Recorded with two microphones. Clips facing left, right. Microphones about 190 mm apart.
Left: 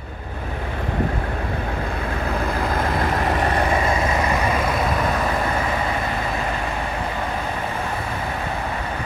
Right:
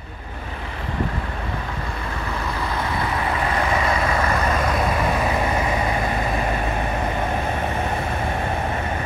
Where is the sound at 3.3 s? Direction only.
25° left (ahead or behind).